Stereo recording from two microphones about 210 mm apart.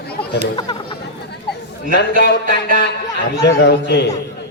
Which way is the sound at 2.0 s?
50° left (ahead or behind).